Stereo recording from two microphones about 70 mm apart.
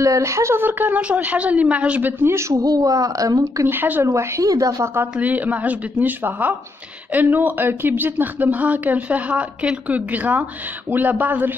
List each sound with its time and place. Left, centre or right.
0.0 s speech: right
2.2 s speech: right
2.5 s a woman's voice: right
3.6 s speech: right
4.0 s speech: right
4.5 s a woman's voice: right
5.0 s speech: right